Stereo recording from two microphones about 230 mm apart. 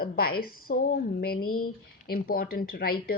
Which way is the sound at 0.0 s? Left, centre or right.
Left.